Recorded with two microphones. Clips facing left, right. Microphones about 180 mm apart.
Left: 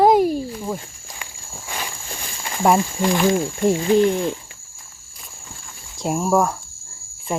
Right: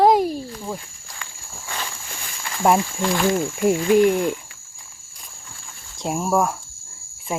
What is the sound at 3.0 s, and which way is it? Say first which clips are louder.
Speech: left 2 dB; 15° left (ahead or behind).